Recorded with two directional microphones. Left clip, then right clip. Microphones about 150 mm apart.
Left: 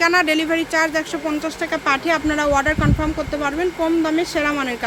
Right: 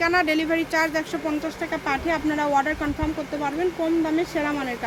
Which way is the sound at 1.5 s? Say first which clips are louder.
Left 6 dB; 25° left (ahead or behind).